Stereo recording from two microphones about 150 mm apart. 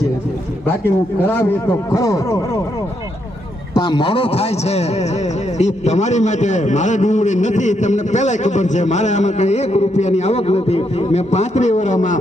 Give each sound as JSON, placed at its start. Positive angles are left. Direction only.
{"t": 0.7, "sound": "a man's voice", "side_deg": 15}
{"t": 3.8, "sound": "a man's voice", "side_deg": 30}